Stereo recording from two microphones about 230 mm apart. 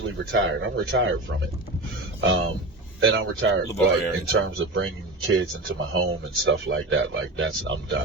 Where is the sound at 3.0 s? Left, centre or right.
Right.